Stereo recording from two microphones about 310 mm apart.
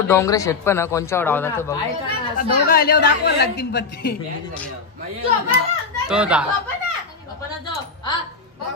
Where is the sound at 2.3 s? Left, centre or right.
Left.